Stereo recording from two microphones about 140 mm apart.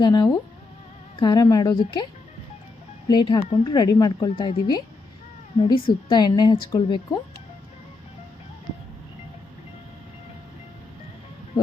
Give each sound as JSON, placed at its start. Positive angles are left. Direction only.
{"t": 0.0, "sound": "speech", "side_deg": 30}
{"t": 3.1, "sound": "a woman's voice", "side_deg": 30}